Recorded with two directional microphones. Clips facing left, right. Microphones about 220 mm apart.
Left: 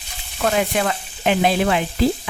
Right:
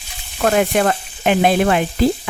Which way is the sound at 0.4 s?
50° right (ahead or behind).